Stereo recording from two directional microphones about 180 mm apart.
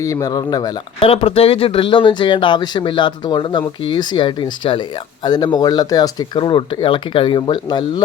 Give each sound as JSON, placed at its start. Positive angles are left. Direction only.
{"t": 0.0, "sound": "speech", "side_deg": 20}